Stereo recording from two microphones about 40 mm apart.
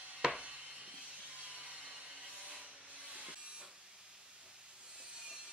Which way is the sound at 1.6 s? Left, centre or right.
Right.